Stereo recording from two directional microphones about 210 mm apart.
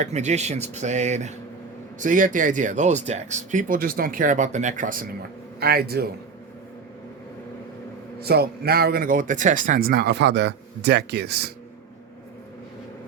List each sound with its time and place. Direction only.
0.0 s speech: 35° right (ahead or behind)
8.2 s speech: 50° right (ahead or behind)